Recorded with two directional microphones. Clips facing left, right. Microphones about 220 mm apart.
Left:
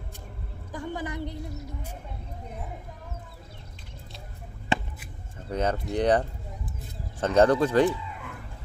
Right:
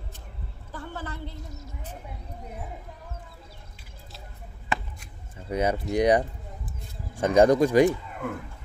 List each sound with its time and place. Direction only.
0.7 s a woman's voice: 15° left (ahead or behind)
5.5 s speech: 10° right (ahead or behind)
7.9 s speech: 50° right (ahead or behind)